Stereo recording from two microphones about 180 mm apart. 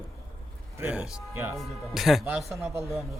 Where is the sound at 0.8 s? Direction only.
10° right (ahead or behind).